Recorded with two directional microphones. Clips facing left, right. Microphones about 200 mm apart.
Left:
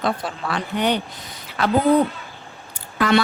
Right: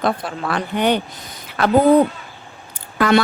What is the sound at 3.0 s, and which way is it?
Speech, 50° right (ahead or behind).